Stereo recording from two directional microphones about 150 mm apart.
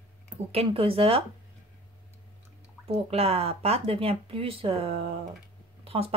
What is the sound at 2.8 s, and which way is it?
Speech, 40° right (ahead or behind).